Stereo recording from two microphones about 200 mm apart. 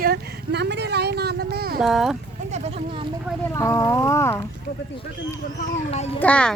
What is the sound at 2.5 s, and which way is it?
Sheep, 35° right (ahead or behind).